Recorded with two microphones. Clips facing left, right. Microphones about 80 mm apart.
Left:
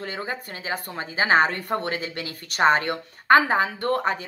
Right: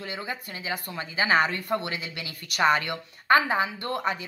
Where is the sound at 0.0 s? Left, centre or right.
Left.